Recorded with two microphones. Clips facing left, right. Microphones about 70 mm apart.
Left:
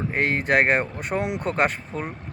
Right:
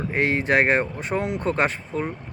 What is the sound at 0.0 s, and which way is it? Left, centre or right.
Speech, centre.